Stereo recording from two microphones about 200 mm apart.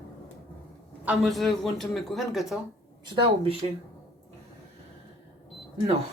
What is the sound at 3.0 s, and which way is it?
Speech, 25° right (ahead or behind).